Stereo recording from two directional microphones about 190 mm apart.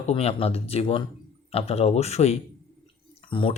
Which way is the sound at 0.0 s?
35° left (ahead or behind).